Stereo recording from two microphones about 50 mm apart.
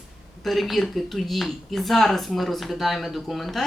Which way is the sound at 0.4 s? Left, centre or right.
Centre.